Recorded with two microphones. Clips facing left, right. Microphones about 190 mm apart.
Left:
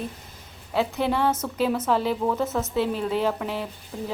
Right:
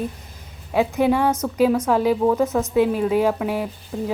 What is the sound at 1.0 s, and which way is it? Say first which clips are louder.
A woman's voice: right 6 dB; 10° right (ahead or behind).